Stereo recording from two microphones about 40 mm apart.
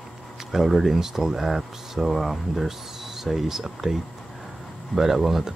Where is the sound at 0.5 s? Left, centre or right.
Centre.